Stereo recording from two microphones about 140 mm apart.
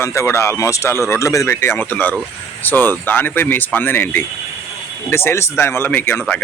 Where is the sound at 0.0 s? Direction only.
20° left (ahead or behind).